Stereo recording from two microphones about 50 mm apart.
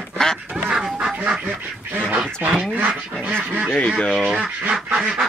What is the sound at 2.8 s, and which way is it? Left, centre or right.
Duck, right.